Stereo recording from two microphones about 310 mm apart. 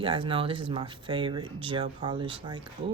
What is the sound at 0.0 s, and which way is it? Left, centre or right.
Speech, centre.